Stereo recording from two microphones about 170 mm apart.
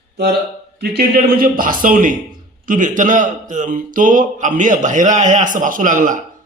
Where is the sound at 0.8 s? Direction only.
65° right (ahead or behind); by 6.1 s 50° right (ahead or behind).